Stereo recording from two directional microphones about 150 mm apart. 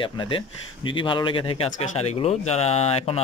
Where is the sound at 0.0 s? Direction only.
35° left (ahead or behind).